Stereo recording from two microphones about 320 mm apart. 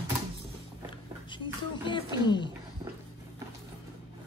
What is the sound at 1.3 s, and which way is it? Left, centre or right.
Music, centre.